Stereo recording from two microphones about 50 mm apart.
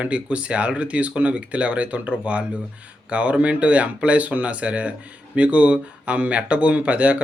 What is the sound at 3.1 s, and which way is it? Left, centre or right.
Speech, right.